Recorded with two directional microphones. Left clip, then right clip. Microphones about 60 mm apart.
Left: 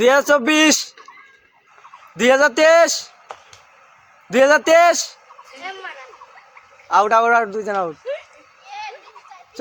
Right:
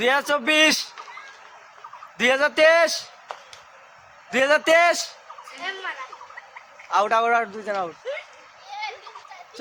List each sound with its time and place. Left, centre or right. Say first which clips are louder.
0.1 s a man's voice: left 6 dB; left
2.1 s a man's voice: left 5 dB; left
4.3 s a man's voice: left 5 dB; left
6.9 s speech: left 6 dB; left